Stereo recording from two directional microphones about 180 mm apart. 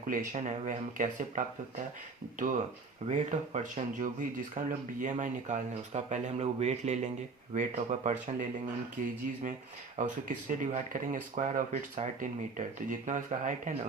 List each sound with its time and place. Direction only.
0.1 s speech: 40° right (ahead or behind)
3.1 s speech: 40° right (ahead or behind)